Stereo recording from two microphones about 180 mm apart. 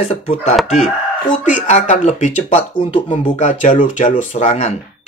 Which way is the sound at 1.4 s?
40° left (ahead or behind).